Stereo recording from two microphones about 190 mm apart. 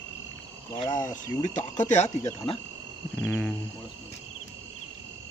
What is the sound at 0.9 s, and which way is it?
Speech, 40° left (ahead or behind).